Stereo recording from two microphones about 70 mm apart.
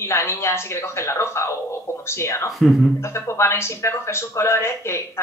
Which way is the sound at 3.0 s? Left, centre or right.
Left.